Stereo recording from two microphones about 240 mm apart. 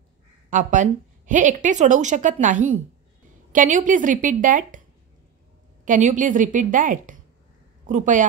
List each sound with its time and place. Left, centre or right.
0.5 s a woman's voice: right
5.9 s a woman's voice: right